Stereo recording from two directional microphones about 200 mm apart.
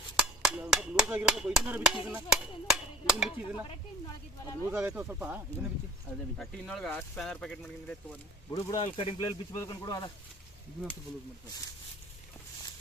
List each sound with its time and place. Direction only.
0.2 s speech: 5° right (ahead or behind)
4.7 s speech: 10° right (ahead or behind)
6.3 s speech: centre (ahead or behind)
8.4 s speech: 15° left (ahead or behind)